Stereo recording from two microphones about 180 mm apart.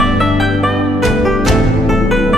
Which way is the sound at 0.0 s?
Centre (ahead or behind).